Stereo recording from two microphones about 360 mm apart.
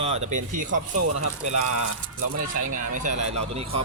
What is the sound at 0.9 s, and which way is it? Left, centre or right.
Speech, right.